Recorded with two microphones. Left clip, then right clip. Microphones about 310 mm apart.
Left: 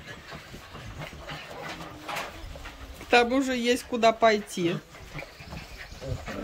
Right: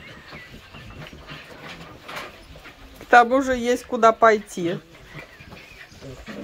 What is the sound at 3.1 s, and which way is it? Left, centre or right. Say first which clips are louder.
Speech: right 7 dB; centre.